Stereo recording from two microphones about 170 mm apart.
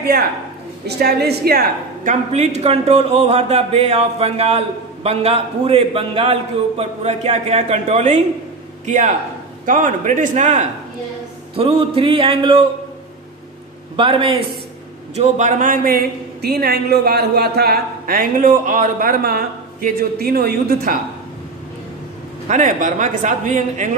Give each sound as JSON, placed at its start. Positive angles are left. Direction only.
{"t": 0.8, "sound": "a man's voice", "side_deg": -70}
{"t": 2.3, "sound": "a man's voice", "side_deg": -40}
{"t": 11.5, "sound": "a man's voice", "side_deg": -35}
{"t": 13.9, "sound": "a man's voice", "side_deg": -30}
{"t": 15.1, "sound": "a man's voice", "side_deg": -45}
{"t": 22.5, "sound": "a man's voice", "side_deg": -45}